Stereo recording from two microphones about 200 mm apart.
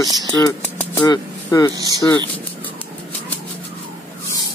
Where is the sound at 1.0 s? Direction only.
20° left (ahead or behind).